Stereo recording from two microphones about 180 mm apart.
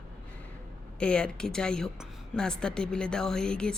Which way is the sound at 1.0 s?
5° left (ahead or behind).